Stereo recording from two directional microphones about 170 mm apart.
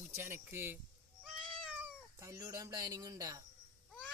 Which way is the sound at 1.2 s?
5° right (ahead or behind).